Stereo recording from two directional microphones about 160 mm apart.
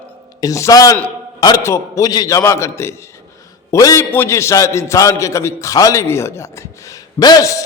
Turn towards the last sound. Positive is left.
turn(degrees=20)  # may be behind; listen again after turning